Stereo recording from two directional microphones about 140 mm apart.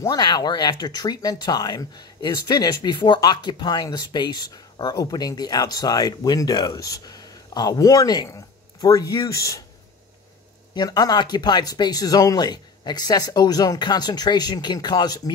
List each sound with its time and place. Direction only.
0.0 s speech: 25° left (ahead or behind)
10.7 s speech: 30° left (ahead or behind)